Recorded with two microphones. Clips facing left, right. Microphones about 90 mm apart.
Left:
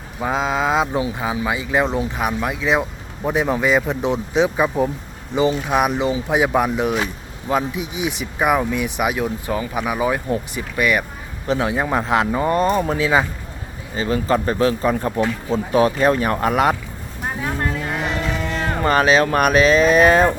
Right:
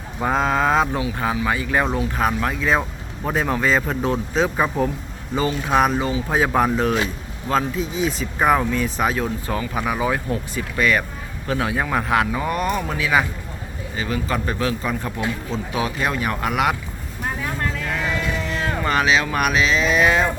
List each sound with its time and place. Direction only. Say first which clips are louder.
0.2 s speech: right 1 dB; 5° left (ahead or behind); by 16.7 s 35° left (ahead or behind)
17.4 s cattle: left 5 dB; 25° left (ahead or behind)
18.5 s speech: left 4 dB; 40° left (ahead or behind)